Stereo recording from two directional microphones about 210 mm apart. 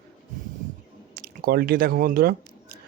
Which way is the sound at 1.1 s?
45° right (ahead or behind).